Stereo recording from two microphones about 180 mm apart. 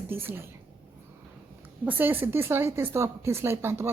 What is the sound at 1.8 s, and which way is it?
Speech, 10° right (ahead or behind).